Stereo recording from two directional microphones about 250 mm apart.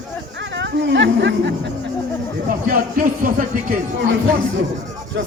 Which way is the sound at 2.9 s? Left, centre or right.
Right.